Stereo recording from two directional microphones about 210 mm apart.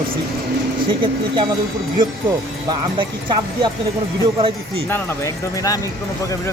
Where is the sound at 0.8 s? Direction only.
25° right (ahead or behind).